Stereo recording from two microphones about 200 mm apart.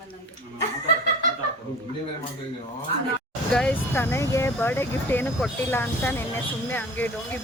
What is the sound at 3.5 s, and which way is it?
Speech, 5° left (ahead or behind).